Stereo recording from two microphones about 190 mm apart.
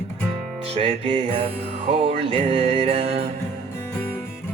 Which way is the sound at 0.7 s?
30° right (ahead or behind).